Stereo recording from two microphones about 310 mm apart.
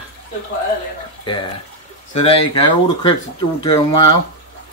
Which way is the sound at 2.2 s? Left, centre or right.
Centre.